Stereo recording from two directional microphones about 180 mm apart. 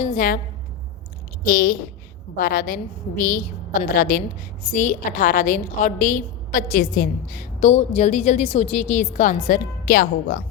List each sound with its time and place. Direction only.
0.0 s a woman's voice: 45° left (ahead or behind)
1.5 s a woman's voice: 55° left (ahead or behind)